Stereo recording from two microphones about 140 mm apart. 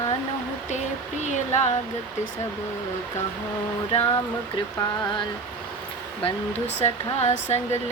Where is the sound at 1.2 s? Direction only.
55° left (ahead or behind).